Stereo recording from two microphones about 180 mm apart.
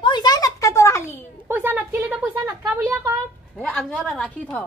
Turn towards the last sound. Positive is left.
turn(degrees=5)  # may be behind; listen again after turning